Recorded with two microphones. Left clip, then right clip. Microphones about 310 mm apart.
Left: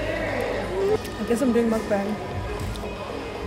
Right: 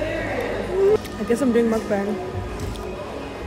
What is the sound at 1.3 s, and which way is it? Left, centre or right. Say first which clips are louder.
Speech: right 2 dB; centre.